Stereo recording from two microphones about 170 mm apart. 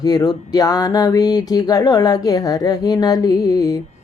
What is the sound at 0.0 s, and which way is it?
Music, 25° left (ahead or behind).